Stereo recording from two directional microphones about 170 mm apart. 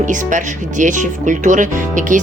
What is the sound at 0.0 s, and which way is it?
Speech, 50° right (ahead or behind).